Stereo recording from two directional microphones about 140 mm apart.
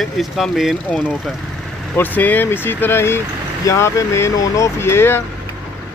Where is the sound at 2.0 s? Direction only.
15° left (ahead or behind).